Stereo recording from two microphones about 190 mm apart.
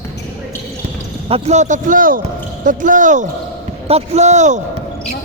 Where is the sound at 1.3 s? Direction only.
35° right (ahead or behind).